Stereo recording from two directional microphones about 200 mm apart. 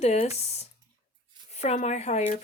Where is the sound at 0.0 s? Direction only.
30° left (ahead or behind).